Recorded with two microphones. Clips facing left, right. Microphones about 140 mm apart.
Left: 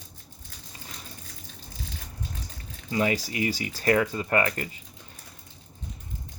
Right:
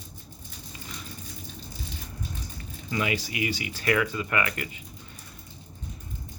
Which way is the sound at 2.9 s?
40° left (ahead or behind).